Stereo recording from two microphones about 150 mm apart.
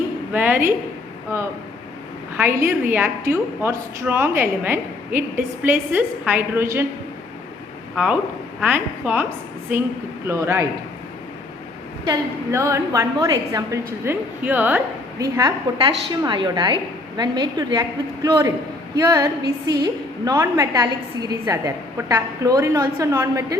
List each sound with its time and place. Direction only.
0.3 s a woman's voice: 10° right (ahead or behind)
2.3 s a woman's voice: 15° right (ahead or behind)
7.9 s a woman's voice: 10° right (ahead or behind)
10.2 s a woman's voice: 20° right (ahead or behind)
12.0 s a woman's voice: 20° right (ahead or behind)
15.2 s a woman's voice: 25° right (ahead or behind)